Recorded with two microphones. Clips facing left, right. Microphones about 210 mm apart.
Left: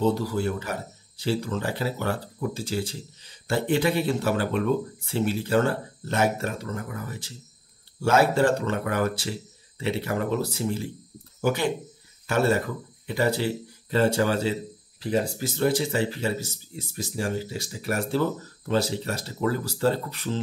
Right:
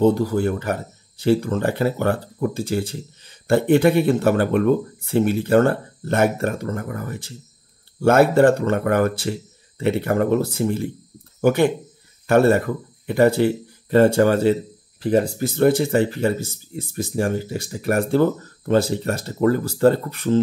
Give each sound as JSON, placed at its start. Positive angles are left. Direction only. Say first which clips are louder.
{"t": 0.0, "sound": "speech", "louder": "right 7 dB", "side_deg": -50}